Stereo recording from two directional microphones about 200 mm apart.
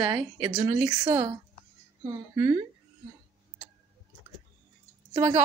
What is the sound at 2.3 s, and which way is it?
Speech, 20° right (ahead or behind).